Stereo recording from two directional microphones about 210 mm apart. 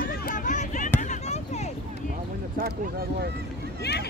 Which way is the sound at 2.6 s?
45° right (ahead or behind).